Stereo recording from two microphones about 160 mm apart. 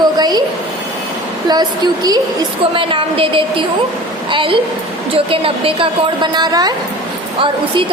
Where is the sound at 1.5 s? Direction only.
25° right (ahead or behind).